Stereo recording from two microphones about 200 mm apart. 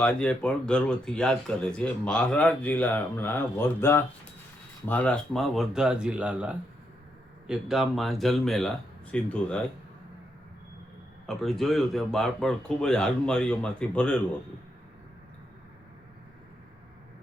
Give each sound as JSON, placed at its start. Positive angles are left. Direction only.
{"t": 0.0, "sound": "speech", "side_deg": 5}
{"t": 11.3, "sound": "speech", "side_deg": 0}